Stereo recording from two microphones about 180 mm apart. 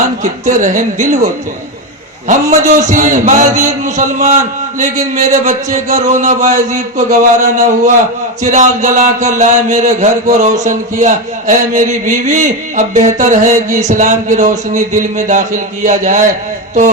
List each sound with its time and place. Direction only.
0.2 s mantra: 45° right (ahead or behind)